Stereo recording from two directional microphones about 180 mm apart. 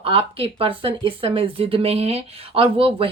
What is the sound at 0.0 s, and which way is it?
Speech, 30° right (ahead or behind).